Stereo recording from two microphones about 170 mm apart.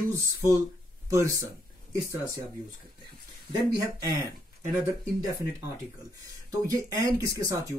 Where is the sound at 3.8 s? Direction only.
20° right (ahead or behind).